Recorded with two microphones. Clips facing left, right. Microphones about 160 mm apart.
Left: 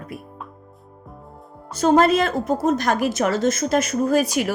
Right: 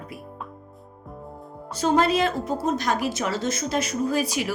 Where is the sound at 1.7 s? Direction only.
50° left (ahead or behind).